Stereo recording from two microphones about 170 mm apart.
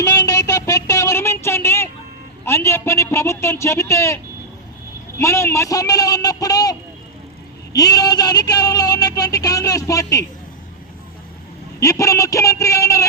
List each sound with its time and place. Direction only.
0.0 s a sound: 20° left (ahead or behind)
5.1 s a woman's voice: 15° left (ahead or behind)
11.8 s a man's voice: 20° left (ahead or behind)